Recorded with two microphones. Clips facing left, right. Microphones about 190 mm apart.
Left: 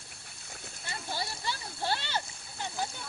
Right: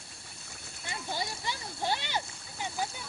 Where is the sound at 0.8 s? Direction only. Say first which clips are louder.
Right 1 dB; 20° right (ahead or behind).